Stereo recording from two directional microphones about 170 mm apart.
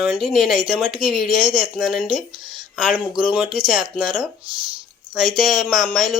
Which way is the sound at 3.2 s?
5° right (ahead or behind).